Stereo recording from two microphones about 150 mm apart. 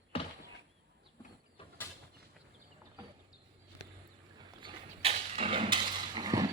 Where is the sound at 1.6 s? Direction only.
35° left (ahead or behind).